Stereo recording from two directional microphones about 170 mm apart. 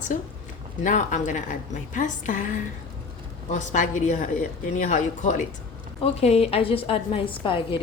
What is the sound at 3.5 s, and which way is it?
A woman's voice, 45° left (ahead or behind).